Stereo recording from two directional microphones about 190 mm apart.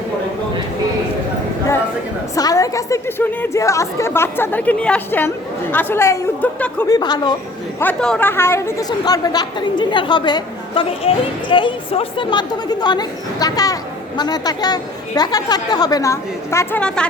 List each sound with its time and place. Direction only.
2.3 s a woman's voice: 20° left (ahead or behind)
6.8 s a woman's voice: 20° left (ahead or behind)
7.8 s a woman's voice: 5° left (ahead or behind)